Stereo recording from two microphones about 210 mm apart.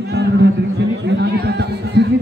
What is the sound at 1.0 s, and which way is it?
Chatter, 55° right (ahead or behind).